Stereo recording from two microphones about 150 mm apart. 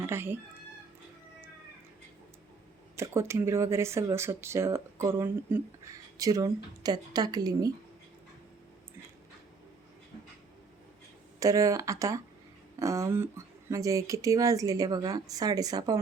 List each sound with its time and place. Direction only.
0.0 s speech: 15° right (ahead or behind)
2.9 s speech: 20° right (ahead or behind)
11.3 s speech: 20° right (ahead or behind)